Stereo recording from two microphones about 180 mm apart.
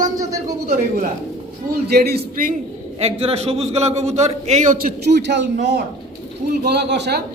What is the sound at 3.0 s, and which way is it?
A man's voice, 35° right (ahead or behind).